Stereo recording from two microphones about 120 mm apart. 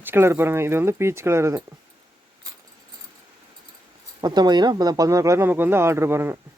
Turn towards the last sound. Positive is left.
turn(degrees=-20)  # may be behind; listen again after turning